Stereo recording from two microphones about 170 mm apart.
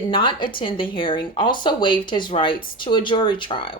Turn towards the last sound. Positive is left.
turn(degrees=30)  # may be behind; listen again after turning